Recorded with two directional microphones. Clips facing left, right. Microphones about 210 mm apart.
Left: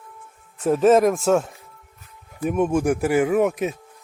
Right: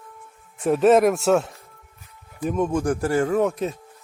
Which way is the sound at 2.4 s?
10° left (ahead or behind).